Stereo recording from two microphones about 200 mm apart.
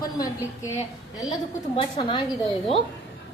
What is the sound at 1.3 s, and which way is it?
Speech, 20° left (ahead or behind).